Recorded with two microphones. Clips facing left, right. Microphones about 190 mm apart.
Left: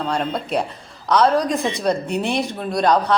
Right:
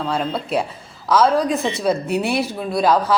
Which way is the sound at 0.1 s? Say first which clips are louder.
Right 1 dB; centre (ahead or behind).